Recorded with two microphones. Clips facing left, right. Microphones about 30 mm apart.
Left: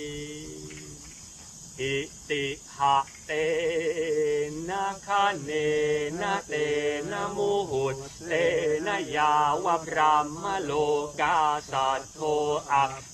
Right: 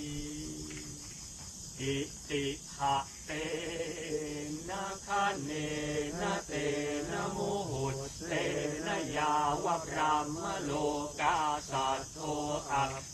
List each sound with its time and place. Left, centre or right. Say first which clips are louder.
0.0 s music: left 5 dB; left
1.8 s cricket: left 6 dB; left
3.0 s a sound: left 10 dB; left
5.0 s mantra: left 6 dB; left
6.1 s mantra: left 6 dB; left
6.5 s mantra: left 7 dB; left
6.7 s mantra: left 8 dB; left
7.4 s cricket: left 9 dB; left
8.3 s mantra: left 10 dB; left
12.2 s cricket: left 14 dB; left
12.5 s mantra: left 6 dB; left